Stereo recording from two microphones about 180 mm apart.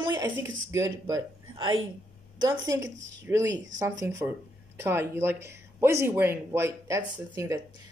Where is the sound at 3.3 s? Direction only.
10° right (ahead or behind).